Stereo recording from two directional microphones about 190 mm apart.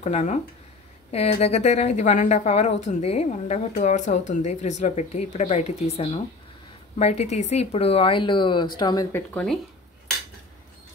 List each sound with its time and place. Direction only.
0.0 s a woman's voice: 35° left (ahead or behind)
9.1 s speech: 10° left (ahead or behind)